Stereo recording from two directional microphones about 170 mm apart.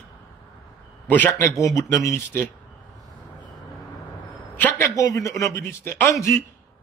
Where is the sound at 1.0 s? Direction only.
10° left (ahead or behind).